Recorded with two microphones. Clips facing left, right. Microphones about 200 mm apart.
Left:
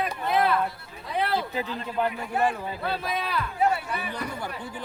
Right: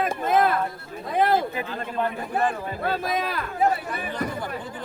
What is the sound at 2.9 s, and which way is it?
Speech, 45° right (ahead or behind).